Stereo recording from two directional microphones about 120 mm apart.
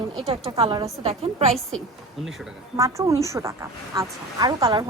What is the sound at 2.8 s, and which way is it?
Speech, 25° right (ahead or behind).